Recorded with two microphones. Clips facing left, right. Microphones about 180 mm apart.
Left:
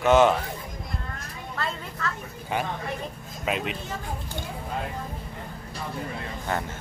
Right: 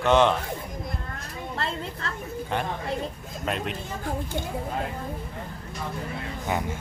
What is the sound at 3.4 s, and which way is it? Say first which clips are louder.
Speech: left 1 dB; 5° left (ahead or behind).